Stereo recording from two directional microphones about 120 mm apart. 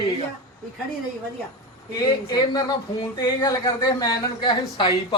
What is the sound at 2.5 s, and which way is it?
A man's voice, 35° left (ahead or behind).